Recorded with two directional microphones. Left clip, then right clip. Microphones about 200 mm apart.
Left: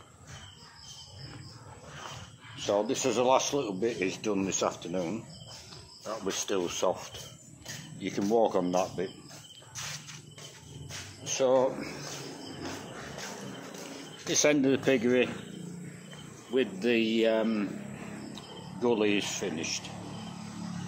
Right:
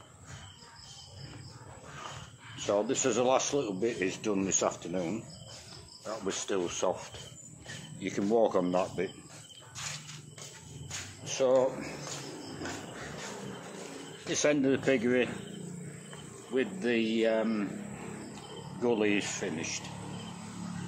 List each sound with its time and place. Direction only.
2.5 s speech: centre (ahead or behind)
9.8 s wild animals: 10° left (ahead or behind)
11.2 s speech: 10° left (ahead or behind)
14.3 s speech: 15° left (ahead or behind)
16.5 s speech: 15° left (ahead or behind)